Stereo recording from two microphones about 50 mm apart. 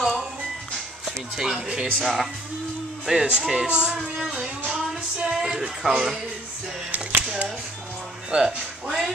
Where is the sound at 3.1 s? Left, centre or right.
Centre.